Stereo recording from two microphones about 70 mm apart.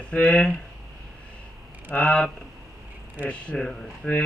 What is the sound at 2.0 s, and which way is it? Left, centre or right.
Speech, centre.